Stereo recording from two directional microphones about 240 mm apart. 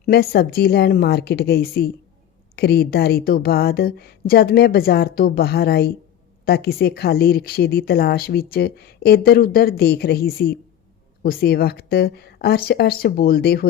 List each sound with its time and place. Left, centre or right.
0.0 s a woman's voice: left